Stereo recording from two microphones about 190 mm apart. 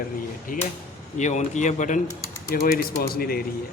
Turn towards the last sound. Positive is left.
turn(degrees=50)  # may be behind; listen again after turning